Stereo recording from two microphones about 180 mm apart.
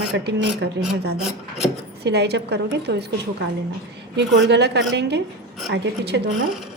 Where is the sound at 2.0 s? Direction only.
65° right (ahead or behind).